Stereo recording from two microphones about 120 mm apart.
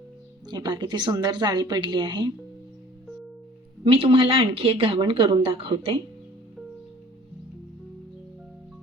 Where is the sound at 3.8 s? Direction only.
45° right (ahead or behind).